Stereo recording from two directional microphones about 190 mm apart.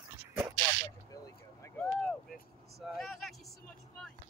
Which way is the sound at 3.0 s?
Centre (ahead or behind).